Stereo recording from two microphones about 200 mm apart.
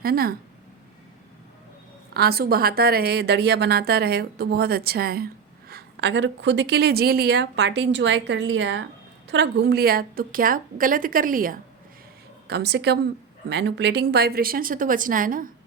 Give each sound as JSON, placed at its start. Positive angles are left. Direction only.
{"t": 0.0, "sound": "a woman's voice", "side_deg": -50}
{"t": 2.1, "sound": "a woman's voice", "side_deg": -50}
{"t": 12.5, "sound": "a woman's voice", "side_deg": -55}